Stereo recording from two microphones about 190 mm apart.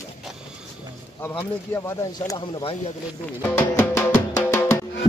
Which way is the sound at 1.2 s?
10° left (ahead or behind).